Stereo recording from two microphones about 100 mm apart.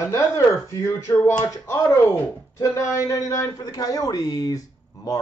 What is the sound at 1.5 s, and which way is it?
Speech, 30° left (ahead or behind).